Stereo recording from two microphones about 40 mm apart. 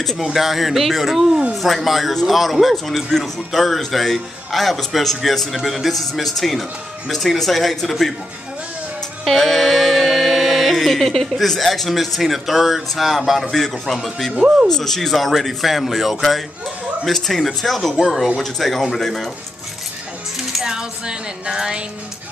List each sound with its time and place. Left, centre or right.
0.2 s a man's voice: centre
9.2 s music: centre
13.5 s a man's voice: centre
14.3 s speech: right
14.7 s a man's voice: centre
20.6 s music: centre